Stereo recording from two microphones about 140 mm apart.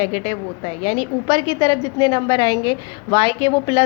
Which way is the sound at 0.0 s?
45° left (ahead or behind).